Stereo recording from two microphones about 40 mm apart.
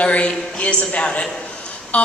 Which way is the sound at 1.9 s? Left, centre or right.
Left.